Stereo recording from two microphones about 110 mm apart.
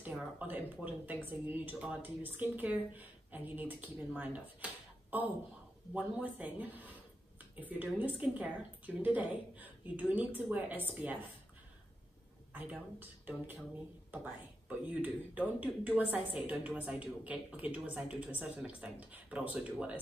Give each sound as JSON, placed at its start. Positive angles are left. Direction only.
{"t": 0.0, "sound": "speech", "side_deg": -15}
{"t": 5.9, "sound": "speech", "side_deg": -15}
{"t": 12.5, "sound": "speech", "side_deg": -15}